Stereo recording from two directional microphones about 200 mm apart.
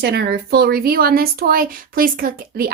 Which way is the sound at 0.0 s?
55° right (ahead or behind).